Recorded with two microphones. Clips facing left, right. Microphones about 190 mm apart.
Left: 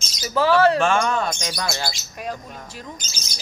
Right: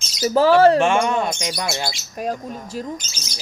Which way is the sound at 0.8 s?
20° right (ahead or behind).